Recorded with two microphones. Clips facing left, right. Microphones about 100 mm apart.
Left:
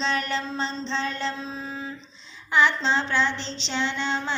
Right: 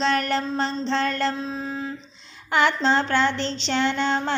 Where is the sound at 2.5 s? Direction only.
60° right (ahead or behind).